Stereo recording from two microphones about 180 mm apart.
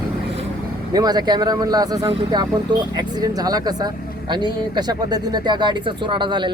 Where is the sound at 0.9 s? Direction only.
20° right (ahead or behind).